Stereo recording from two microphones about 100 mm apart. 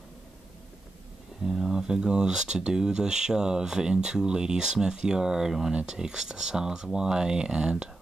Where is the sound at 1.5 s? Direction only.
5° right (ahead or behind).